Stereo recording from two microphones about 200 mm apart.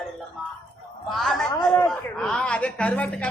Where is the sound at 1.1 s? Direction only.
Centre (ahead or behind).